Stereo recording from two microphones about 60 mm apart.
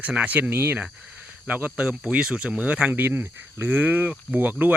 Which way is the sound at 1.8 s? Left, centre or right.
Centre.